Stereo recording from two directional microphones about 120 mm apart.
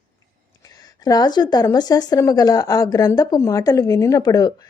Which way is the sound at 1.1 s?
35° left (ahead or behind).